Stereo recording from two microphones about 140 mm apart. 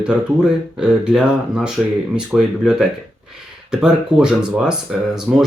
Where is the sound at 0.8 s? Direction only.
5° right (ahead or behind).